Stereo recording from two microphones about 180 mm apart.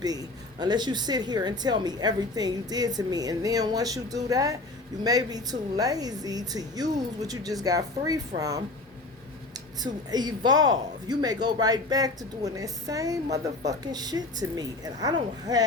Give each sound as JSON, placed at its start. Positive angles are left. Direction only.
{"t": 0.0, "sound": "a woman's voice", "side_deg": -20}
{"t": 9.8, "sound": "a woman's voice", "side_deg": -20}